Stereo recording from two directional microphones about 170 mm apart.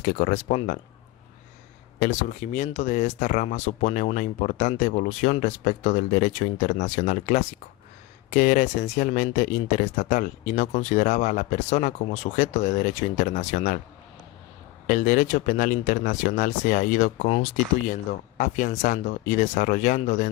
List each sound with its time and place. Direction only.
0.0 s speech: 45° left (ahead or behind)
2.0 s speech: 45° left (ahead or behind)
14.8 s speech: 50° left (ahead or behind)